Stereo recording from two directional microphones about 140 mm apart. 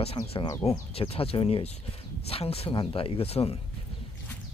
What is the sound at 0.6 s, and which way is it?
Speech, 45° left (ahead or behind).